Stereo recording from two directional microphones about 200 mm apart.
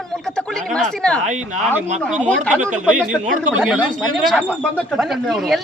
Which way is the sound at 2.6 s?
40° right (ahead or behind).